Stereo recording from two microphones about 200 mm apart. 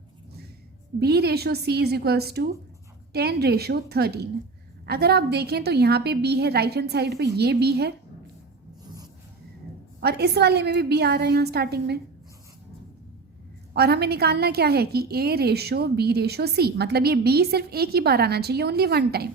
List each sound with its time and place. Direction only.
0.9 s a woman's voice: 55° right (ahead or behind)
10.0 s a woman's voice: 55° right (ahead or behind)
13.7 s a woman's voice: 55° right (ahead or behind)